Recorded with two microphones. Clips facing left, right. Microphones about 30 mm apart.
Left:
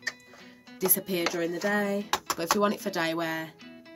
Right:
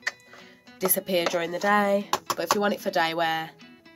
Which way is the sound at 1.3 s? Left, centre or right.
Right.